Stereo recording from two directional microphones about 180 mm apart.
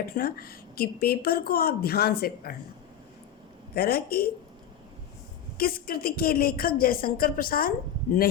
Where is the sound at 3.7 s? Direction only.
55° left (ahead or behind).